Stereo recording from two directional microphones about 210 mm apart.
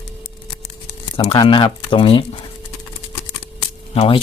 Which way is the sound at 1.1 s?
20° left (ahead or behind).